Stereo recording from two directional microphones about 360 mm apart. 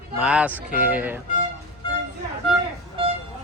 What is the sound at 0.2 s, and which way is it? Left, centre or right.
Speech, centre.